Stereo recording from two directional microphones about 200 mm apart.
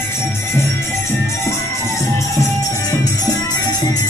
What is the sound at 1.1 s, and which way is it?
Music, 15° left (ahead or behind).